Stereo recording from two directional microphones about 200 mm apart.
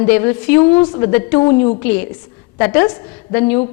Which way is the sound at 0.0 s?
10° left (ahead or behind).